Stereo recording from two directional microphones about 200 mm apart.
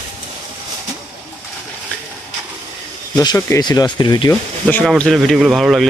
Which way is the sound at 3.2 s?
20° left (ahead or behind).